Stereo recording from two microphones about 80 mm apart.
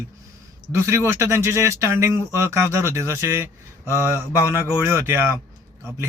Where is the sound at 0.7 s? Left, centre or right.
Right.